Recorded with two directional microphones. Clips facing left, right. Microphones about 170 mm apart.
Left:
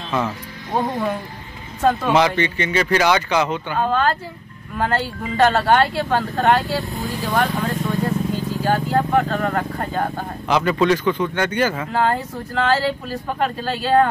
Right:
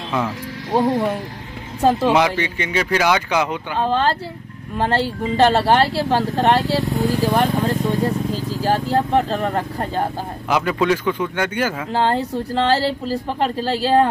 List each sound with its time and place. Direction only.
1.8 s speech: 30° right (ahead or behind)
2.1 s speech: 10° right (ahead or behind)
3.8 s speech: 30° right (ahead or behind)
7.1 s speech: 30° right (ahead or behind)
10.5 s speech: 5° right (ahead or behind)
11.9 s speech: 30° right (ahead or behind)